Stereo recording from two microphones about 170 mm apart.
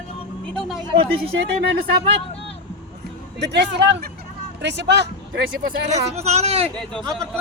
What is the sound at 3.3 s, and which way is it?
Speech, 90° right.